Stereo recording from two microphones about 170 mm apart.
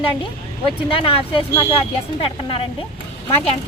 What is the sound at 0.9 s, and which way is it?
Speech, 30° left (ahead or behind).